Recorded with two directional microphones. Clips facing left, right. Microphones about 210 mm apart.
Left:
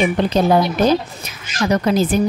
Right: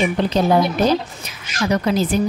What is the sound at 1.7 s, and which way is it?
Speech, 45° left (ahead or behind).